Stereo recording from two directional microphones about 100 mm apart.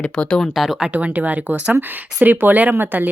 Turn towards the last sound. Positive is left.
turn(degrees=-20)  # may be behind; listen again after turning